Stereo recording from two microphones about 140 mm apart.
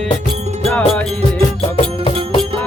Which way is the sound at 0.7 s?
10° left (ahead or behind).